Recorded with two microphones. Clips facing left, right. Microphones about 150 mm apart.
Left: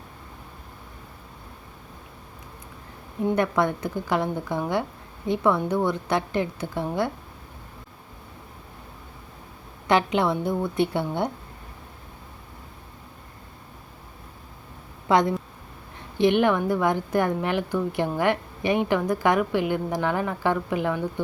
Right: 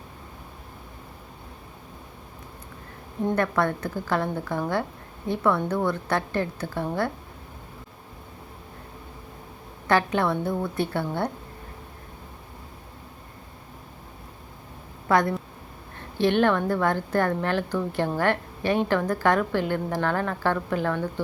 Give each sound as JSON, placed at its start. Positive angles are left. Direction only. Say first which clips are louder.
{"t": 3.2, "sound": "a woman's voice", "louder": "left 1 dB", "side_deg": 15}
{"t": 9.8, "sound": "a woman's voice", "louder": "left 1 dB", "side_deg": 20}
{"t": 15.0, "sound": "a woman's voice", "louder": "left 1 dB", "side_deg": 15}